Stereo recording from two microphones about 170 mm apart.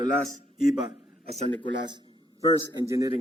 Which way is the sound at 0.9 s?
35° right (ahead or behind).